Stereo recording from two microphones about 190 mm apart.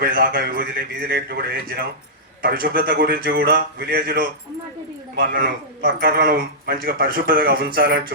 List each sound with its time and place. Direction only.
0.0 s speech: 55° right (ahead or behind)